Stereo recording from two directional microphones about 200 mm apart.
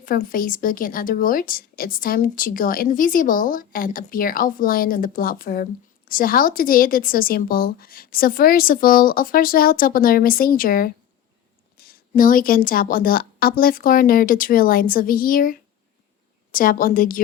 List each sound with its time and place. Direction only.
0.0 s speech: 45° left (ahead or behind)